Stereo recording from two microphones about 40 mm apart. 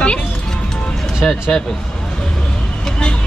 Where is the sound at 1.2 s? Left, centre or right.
Centre.